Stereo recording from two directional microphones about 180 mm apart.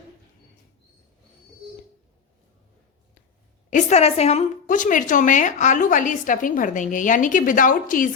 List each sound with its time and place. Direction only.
3.7 s a woman's voice: 45° left (ahead or behind)